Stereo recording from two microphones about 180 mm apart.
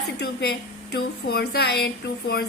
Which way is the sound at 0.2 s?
65° left (ahead or behind).